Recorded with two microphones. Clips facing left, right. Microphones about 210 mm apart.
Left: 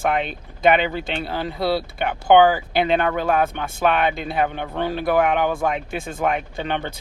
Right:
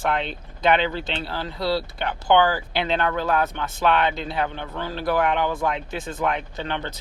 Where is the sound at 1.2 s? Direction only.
15° left (ahead or behind).